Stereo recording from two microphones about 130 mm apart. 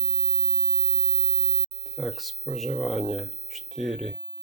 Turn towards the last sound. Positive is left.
turn(degrees=0)  # may be behind; listen again after turning